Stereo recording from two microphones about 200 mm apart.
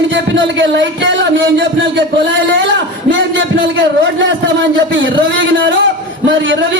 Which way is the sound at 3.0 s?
70° right (ahead or behind).